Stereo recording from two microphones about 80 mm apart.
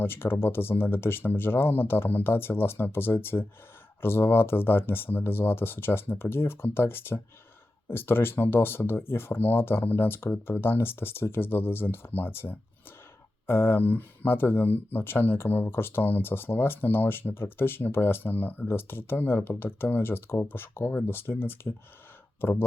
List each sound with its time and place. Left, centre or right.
0.0 s speech: left